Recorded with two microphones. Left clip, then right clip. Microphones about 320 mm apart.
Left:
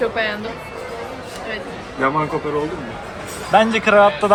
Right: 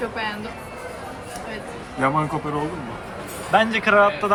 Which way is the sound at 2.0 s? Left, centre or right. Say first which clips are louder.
Left 2 dB; right.